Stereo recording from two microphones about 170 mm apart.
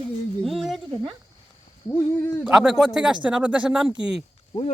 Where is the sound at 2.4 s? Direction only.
5° right (ahead or behind).